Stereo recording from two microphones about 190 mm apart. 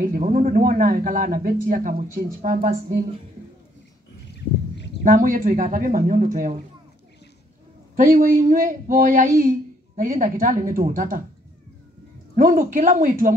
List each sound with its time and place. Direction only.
0.0 s a man's voice: 45° right (ahead or behind)
4.3 s a sound: 65° left (ahead or behind)
5.0 s a man's voice: 45° right (ahead or behind)
7.9 s a man's voice: 50° right (ahead or behind)
12.4 s a man's voice: 45° right (ahead or behind)